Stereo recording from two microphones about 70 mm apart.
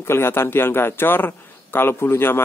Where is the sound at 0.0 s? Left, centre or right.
Left.